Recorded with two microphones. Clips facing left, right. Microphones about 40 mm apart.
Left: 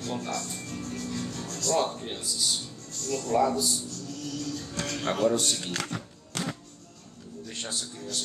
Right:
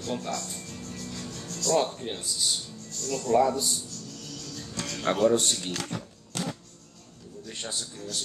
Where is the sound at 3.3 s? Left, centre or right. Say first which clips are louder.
Right 2 dB; centre.